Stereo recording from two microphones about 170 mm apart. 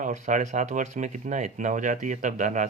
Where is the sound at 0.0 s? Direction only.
45° right (ahead or behind).